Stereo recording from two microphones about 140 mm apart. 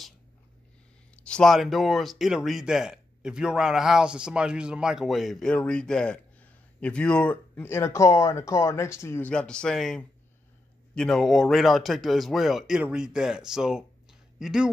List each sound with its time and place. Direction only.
1.1 s speech: 5° left (ahead or behind)
9.3 s speech: 5° left (ahead or behind)